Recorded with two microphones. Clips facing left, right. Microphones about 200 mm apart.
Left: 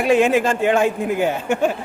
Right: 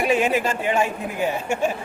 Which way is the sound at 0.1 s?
80° left.